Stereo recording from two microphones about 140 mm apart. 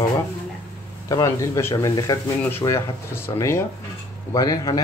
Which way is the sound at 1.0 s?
25° left (ahead or behind).